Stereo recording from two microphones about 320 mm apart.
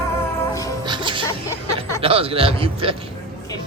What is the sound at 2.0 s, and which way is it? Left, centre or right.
Speech, centre.